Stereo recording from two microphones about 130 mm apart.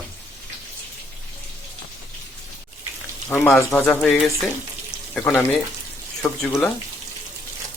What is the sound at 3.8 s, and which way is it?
Speech, 5° left (ahead or behind).